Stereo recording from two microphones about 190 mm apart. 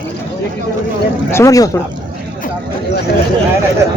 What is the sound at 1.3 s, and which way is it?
Speech, 15° left (ahead or behind).